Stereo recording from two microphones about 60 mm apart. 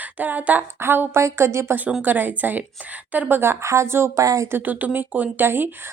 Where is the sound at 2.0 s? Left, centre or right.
Right.